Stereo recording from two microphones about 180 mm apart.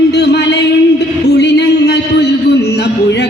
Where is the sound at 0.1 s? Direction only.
70° left (ahead or behind).